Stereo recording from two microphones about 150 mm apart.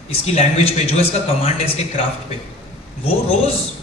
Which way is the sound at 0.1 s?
45° left (ahead or behind).